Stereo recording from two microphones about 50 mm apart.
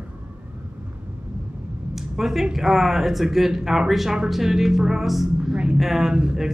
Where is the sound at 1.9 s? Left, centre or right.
Centre.